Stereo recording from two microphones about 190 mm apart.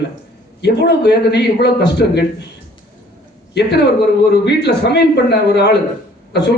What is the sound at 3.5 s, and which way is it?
A man's voice, 60° left (ahead or behind).